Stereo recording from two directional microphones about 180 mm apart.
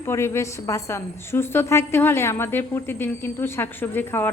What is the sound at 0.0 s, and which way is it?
A woman's voice, 15° left (ahead or behind).